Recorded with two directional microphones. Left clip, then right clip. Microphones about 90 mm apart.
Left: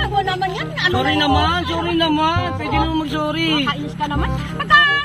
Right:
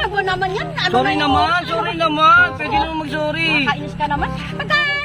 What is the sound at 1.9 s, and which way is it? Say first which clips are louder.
Speech: right 7 dB; 50° right (ahead or behind).